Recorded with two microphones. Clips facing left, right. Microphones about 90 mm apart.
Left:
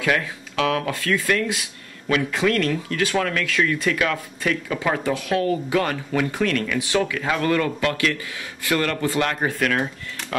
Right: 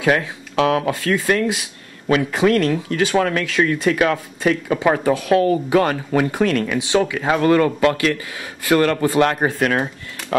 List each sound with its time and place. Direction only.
0.0 s speech: 30° right (ahead or behind)